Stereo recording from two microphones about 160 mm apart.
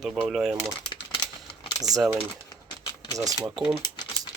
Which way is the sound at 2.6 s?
25° left (ahead or behind).